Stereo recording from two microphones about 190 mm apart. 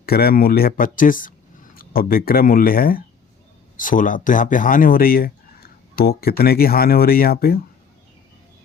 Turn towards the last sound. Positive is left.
turn(degrees=50)  # may be behind; listen again after turning